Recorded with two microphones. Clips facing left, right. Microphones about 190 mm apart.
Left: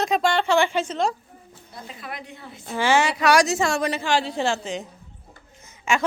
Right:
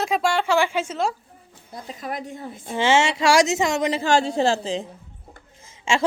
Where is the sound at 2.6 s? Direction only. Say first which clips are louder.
Right 1 dB; 20° right (ahead or behind).